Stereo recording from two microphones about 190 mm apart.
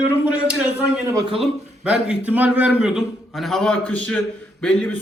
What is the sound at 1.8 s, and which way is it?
A man's voice, 5° right (ahead or behind).